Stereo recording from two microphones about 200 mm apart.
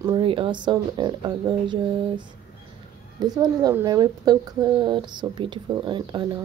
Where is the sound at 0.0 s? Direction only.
25° right (ahead or behind).